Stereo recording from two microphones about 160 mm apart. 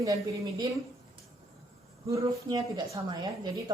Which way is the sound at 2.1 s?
20° right (ahead or behind).